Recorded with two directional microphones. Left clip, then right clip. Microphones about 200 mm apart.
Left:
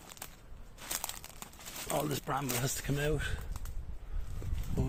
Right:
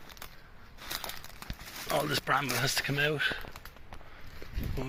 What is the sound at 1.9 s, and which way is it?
Speech, 10° left (ahead or behind).